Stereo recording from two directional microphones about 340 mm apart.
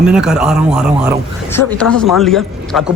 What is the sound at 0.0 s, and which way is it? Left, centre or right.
Speech, centre.